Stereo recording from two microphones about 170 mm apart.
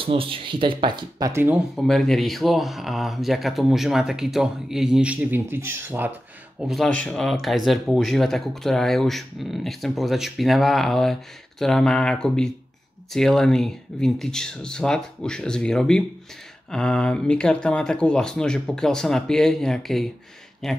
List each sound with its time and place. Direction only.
0.0 s speech: 30° right (ahead or behind)
1.3 s speech: 10° right (ahead or behind)
1.8 s speech: centre (ahead or behind)
6.6 s speech: centre (ahead or behind)